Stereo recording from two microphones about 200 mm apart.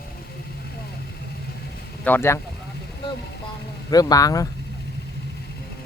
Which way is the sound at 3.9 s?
20° left (ahead or behind).